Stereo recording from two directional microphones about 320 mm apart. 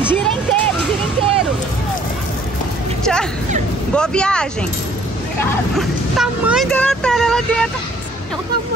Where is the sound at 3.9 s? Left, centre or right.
Centre.